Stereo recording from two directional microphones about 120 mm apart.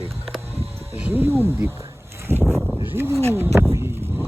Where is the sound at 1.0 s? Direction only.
15° right (ahead or behind).